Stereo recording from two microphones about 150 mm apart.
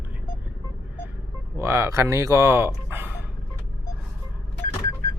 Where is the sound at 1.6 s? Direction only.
20° right (ahead or behind).